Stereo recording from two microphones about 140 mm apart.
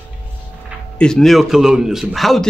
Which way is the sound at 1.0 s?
5° left (ahead or behind).